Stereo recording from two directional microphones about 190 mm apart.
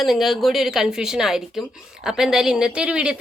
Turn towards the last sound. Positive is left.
turn(degrees=-5)  # may be behind; listen again after turning